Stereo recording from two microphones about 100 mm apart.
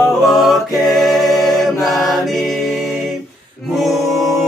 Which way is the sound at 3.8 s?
Centre (ahead or behind).